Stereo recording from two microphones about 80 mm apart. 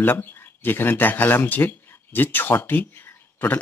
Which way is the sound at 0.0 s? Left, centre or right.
Left.